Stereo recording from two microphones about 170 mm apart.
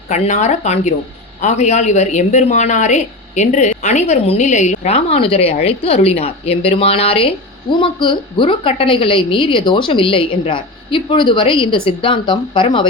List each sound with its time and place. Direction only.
0.1 s speech: 45° left (ahead or behind)